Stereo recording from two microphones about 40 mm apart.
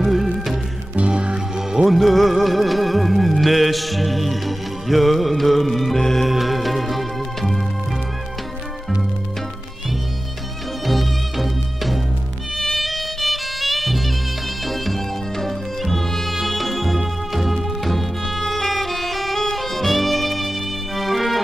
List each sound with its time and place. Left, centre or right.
0.0 s music: centre
0.9 s music: right
1.9 s music: centre
10.9 s music: centre